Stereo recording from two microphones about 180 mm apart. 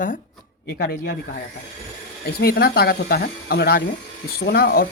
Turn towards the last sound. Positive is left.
turn(degrees=55)  # may be behind; listen again after turning